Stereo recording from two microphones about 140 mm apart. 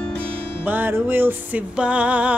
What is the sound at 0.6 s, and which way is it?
Music, 15° right (ahead or behind).